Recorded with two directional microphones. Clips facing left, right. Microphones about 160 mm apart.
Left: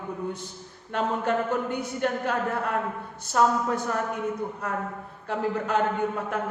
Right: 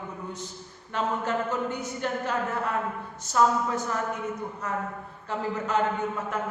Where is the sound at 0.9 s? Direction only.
60° left (ahead or behind).